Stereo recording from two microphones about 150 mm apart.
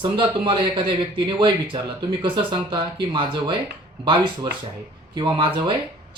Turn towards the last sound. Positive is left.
turn(degrees=-30)  # may be behind; listen again after turning